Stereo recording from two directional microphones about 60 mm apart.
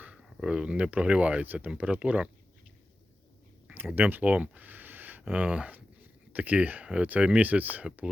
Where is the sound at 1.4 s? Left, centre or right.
Right.